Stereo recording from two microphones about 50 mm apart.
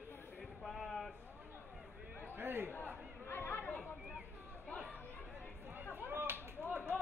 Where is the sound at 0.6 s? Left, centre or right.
Centre.